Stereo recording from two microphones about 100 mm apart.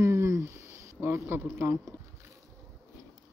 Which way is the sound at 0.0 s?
30° right (ahead or behind).